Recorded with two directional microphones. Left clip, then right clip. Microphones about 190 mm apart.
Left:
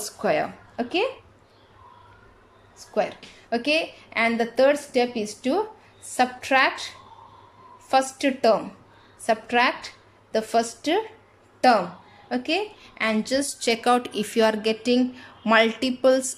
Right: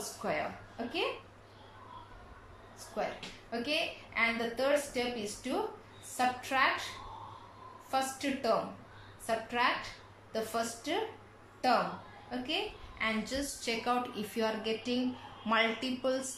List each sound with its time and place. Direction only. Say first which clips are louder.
0.2 s a woman's voice: left 12 dB; 60° left (ahead or behind)
2.9 s a woman's voice: left 11 dB; 55° left (ahead or behind)
7.9 s a woman's voice: left 12 dB; 55° left (ahead or behind)